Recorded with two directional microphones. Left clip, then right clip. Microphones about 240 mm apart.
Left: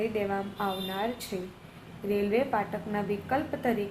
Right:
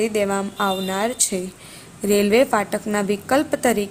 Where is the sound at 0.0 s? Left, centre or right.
Right.